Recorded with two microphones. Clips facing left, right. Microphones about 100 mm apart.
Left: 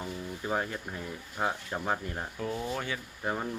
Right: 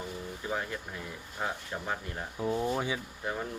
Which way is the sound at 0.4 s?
35° left (ahead or behind).